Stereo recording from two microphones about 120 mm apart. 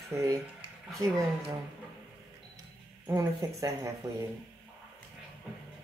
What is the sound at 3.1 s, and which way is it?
Speech, 30° right (ahead or behind).